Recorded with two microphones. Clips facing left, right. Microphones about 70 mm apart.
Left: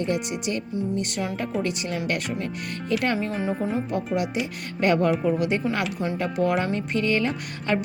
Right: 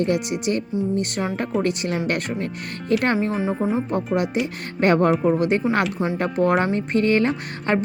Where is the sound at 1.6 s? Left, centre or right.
Right.